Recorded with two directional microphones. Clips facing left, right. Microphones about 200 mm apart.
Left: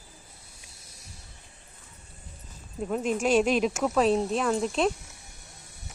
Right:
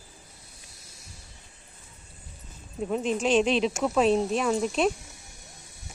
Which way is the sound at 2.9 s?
5° left (ahead or behind).